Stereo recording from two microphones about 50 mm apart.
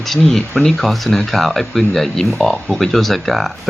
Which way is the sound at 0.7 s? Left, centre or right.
Centre.